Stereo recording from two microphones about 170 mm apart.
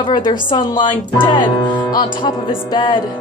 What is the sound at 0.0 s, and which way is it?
Speech, 25° left (ahead or behind).